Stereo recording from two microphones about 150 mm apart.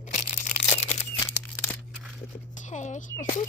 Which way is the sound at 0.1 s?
50° left (ahead or behind).